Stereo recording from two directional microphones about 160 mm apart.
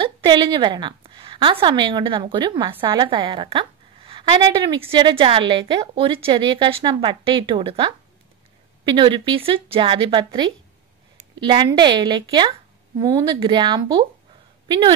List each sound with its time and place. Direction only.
0.0 s a woman's voice: 30° right (ahead or behind)